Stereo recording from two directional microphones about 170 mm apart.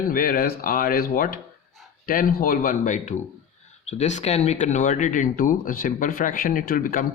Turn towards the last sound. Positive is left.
turn(degrees=55)  # may be behind; listen again after turning